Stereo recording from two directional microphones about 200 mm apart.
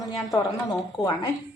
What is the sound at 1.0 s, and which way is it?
Speech, centre (ahead or behind).